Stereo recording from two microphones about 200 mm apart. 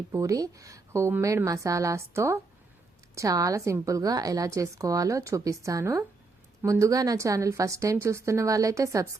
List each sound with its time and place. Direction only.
0.1 s a woman's voice: 15° right (ahead or behind)